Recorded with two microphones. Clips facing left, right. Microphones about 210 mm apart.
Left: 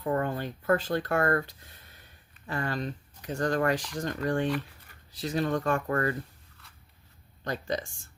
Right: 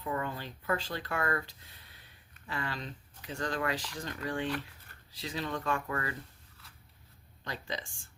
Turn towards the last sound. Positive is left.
turn(degrees=45)  # may be behind; listen again after turning